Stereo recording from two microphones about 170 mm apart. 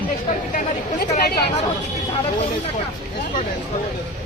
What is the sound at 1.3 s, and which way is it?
Speech, 70° left (ahead or behind).